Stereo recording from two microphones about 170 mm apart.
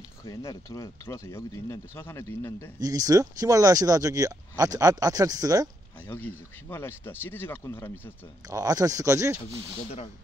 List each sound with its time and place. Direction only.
0.2 s speech: 20° left (ahead or behind)
2.8 s speech: 20° right (ahead or behind)
6.0 s speech: 10° left (ahead or behind)
8.5 s speech: 20° right (ahead or behind)